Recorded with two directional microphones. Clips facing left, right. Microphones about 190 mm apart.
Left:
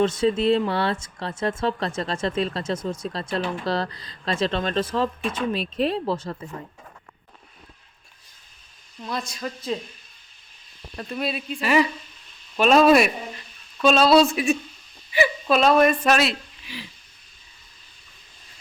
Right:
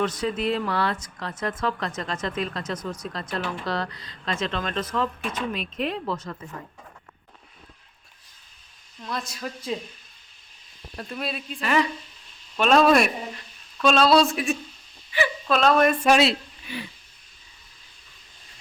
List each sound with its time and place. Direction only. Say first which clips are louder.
0.0 s speech: left 5 dB; 25° left (ahead or behind)
9.0 s speech: left 2 dB; centre (ahead or behind)
10.9 s a woman's voice: left 4 dB; centre (ahead or behind)